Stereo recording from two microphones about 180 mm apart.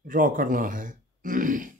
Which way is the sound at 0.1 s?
50° right (ahead or behind).